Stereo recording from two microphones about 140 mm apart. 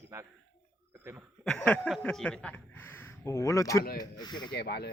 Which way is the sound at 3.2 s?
20° left (ahead or behind).